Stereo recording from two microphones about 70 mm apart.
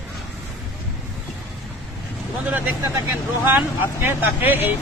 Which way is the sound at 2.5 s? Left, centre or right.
Right.